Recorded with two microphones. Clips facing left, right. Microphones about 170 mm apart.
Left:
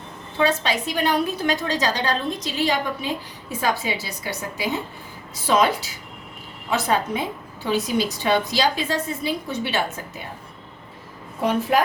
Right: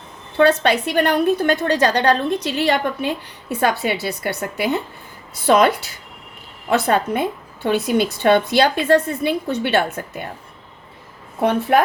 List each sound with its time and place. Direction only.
0.3 s a woman's voice: 60° right (ahead or behind)